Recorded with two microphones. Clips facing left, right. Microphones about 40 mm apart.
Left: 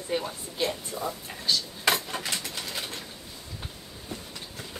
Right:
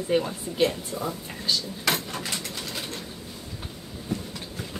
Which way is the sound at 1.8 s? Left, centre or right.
Centre.